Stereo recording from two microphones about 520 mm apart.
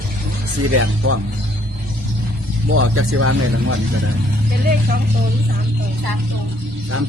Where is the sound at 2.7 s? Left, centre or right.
Right.